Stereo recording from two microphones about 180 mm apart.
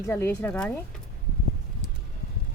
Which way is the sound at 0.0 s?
15° left (ahead or behind).